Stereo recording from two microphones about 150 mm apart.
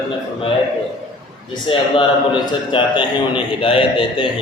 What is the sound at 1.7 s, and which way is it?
A man's voice, 40° left (ahead or behind).